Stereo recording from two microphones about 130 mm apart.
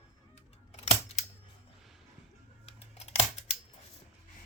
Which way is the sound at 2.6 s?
50° left (ahead or behind).